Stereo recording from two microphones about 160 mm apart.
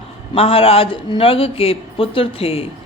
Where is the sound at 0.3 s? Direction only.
35° left (ahead or behind).